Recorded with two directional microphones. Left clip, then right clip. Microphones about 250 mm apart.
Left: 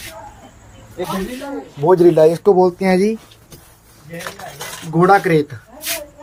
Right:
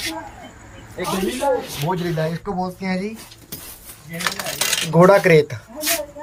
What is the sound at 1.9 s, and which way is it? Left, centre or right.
Speech, left.